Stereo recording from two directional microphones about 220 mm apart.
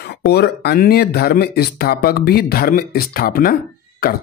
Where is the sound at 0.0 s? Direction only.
50° left (ahead or behind).